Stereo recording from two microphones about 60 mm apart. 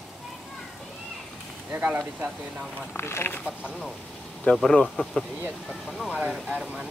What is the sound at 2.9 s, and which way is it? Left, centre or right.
Speech, left.